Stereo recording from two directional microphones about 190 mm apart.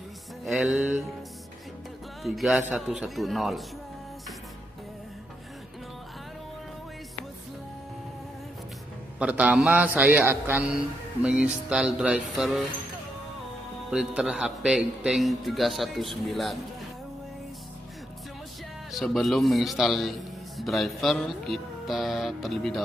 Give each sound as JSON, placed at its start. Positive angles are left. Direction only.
{"t": 0.5, "sound": "a man's voice", "side_deg": 0}
{"t": 2.2, "sound": "a man's voice", "side_deg": 0}
{"t": 9.2, "sound": "a man's voice", "side_deg": -5}
{"t": 13.8, "sound": "a man's voice", "side_deg": -5}
{"t": 18.9, "sound": "a man's voice", "side_deg": 0}